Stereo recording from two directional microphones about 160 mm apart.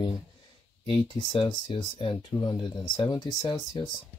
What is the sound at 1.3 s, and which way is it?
Speech, 30° left (ahead or behind).